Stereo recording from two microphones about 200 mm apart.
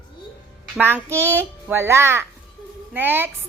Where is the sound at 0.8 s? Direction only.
10° right (ahead or behind).